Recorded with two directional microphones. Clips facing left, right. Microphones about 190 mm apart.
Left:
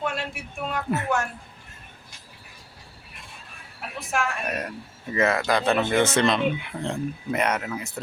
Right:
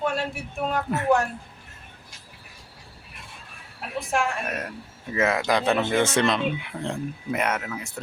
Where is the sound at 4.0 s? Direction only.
30° right (ahead or behind).